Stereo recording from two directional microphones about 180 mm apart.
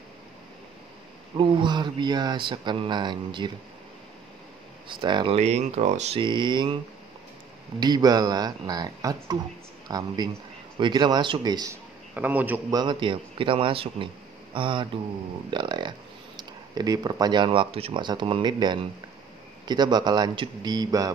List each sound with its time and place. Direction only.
1.3 s speech: 25° right (ahead or behind)
4.8 s speech: 25° right (ahead or behind)
7.8 s speech: 20° right (ahead or behind)
12.1 s a man's voice: 10° right (ahead or behind)
12.7 s speech: 25° right (ahead or behind)